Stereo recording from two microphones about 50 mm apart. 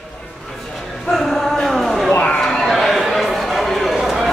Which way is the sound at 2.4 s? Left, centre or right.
Centre.